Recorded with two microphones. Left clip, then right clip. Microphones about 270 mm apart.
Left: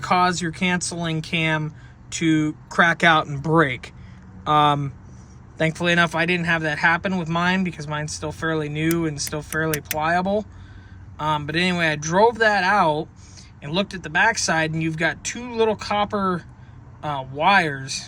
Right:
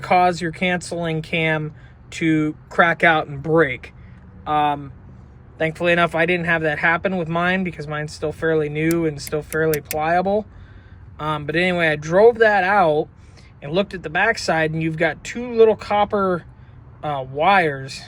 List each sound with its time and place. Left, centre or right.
0.0 s speech: centre